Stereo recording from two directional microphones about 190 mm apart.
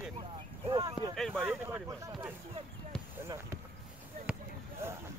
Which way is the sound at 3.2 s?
10° right (ahead or behind).